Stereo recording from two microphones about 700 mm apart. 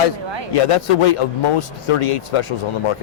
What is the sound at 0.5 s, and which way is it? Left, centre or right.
A man's voice, left.